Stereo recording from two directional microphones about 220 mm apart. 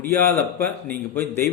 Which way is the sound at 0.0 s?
10° left (ahead or behind).